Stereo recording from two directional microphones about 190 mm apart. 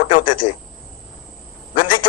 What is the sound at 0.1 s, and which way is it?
Speech, 45° left (ahead or behind).